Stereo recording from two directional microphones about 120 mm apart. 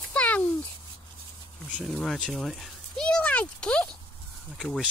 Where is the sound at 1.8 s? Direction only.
Centre (ahead or behind).